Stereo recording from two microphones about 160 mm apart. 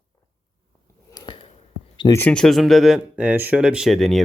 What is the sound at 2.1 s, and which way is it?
A man's voice, 5° left (ahead or behind).